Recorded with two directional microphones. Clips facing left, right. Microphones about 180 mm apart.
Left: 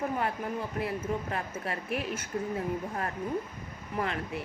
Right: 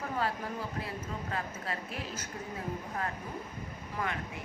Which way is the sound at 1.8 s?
65° left (ahead or behind).